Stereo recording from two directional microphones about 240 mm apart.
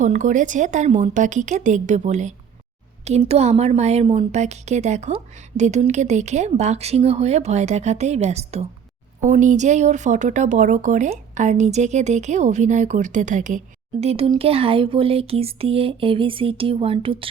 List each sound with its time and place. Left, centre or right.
0.0 s a woman's voice: right